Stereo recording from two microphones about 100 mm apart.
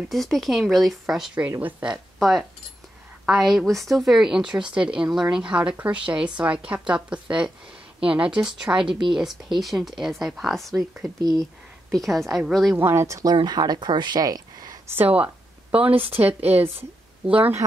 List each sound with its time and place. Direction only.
0.1 s speech: centre (ahead or behind)
2.1 s speech: centre (ahead or behind)
11.0 s speech: 40° right (ahead or behind)
11.9 s speech: centre (ahead or behind)
12.7 s speech: 25° right (ahead or behind)
13.3 s speech: 45° right (ahead or behind)
14.9 s speech: 15° right (ahead or behind)